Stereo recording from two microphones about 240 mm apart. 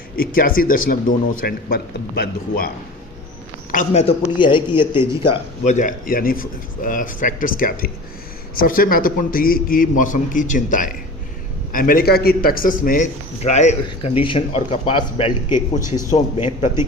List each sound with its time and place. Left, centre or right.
0.2 s a man's voice: left
3.7 s a man's voice: left